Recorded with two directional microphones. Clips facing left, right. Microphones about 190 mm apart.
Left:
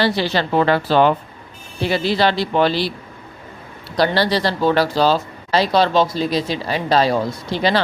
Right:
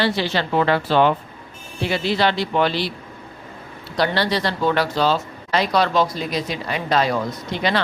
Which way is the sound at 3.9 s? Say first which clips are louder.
Left 3 dB; 35° left (ahead or behind).